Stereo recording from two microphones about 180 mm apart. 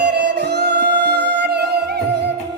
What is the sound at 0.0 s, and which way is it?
Music, 70° right (ahead or behind).